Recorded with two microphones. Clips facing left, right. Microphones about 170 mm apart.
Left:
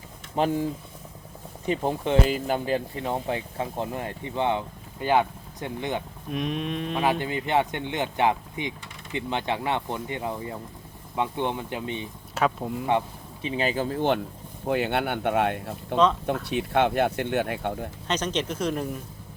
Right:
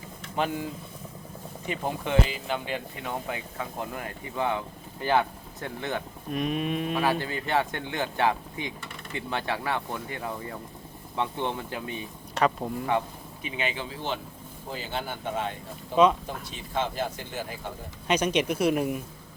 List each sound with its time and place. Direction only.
0.3 s speech: 35° left (ahead or behind)
2.2 s speech: 45° left (ahead or behind); by 6.0 s 20° left (ahead or behind)
6.3 s livestock: centre (ahead or behind)
7.0 s speech: 20° left (ahead or behind)
12.3 s speech: centre (ahead or behind)
13.4 s speech: 35° left (ahead or behind); by 14.2 s 55° left (ahead or behind)
14.7 s speech: 65° left (ahead or behind)
18.1 s speech: 10° right (ahead or behind)